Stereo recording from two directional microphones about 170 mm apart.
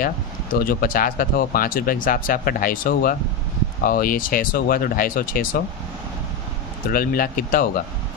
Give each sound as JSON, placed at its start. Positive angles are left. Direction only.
{"t": 0.6, "sound": "speech", "side_deg": 60}
{"t": 6.9, "sound": "speech", "side_deg": 60}